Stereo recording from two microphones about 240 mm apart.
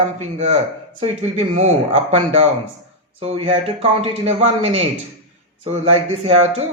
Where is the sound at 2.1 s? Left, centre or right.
Right.